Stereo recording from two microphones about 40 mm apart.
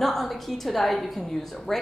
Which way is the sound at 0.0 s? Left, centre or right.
Centre.